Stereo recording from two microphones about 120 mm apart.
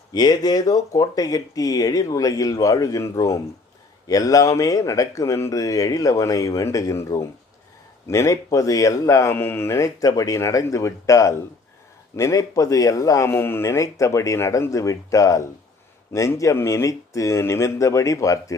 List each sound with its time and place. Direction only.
0.1 s speech: 35° left (ahead or behind)